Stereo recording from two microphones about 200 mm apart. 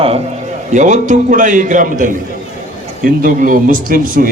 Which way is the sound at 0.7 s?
40° right (ahead or behind).